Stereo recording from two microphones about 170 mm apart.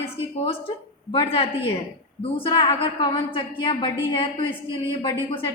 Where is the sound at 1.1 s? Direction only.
35° left (ahead or behind).